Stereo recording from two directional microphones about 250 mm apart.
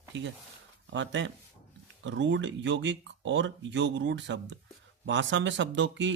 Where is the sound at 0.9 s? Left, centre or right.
Right.